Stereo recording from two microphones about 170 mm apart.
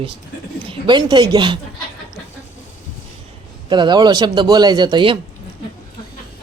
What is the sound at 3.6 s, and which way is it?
A man's voice, 25° right (ahead or behind).